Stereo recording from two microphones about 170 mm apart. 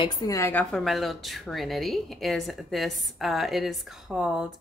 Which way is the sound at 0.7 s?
Centre (ahead or behind).